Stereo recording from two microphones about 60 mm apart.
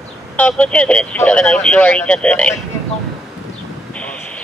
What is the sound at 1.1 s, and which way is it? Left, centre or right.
Speech, left.